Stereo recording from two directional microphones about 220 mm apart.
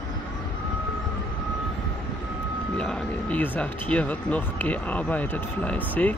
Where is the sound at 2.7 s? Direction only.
5° left (ahead or behind).